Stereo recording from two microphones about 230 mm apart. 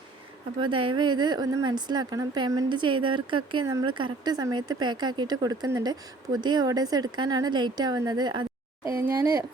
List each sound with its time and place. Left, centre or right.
0.6 s speech: right